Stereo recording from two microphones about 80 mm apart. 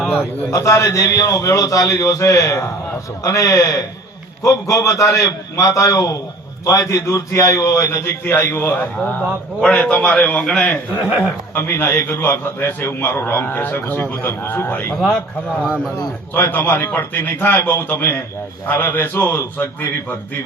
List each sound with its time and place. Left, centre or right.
0.5 s a man's voice: left
9.0 s a man's voice: centre
10.9 s speech: centre
11.5 s a man's voice: left
16.3 s a man's voice: left